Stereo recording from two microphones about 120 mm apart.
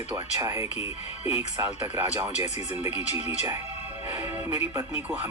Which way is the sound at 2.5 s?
70° left (ahead or behind).